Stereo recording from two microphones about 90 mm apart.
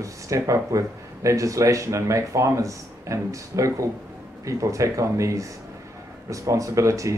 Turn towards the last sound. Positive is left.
turn(degrees=-35)  # may be behind; listen again after turning